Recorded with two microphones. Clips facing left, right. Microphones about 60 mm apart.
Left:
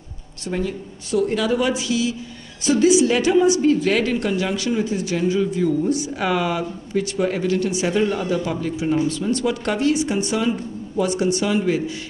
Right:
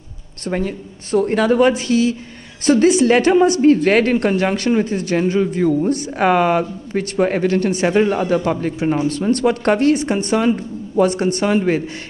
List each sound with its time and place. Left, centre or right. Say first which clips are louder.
0.5 s a woman's voice: right 3 dB; right